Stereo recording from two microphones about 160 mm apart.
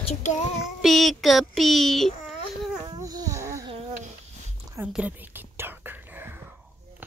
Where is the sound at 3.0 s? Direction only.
20° right (ahead or behind).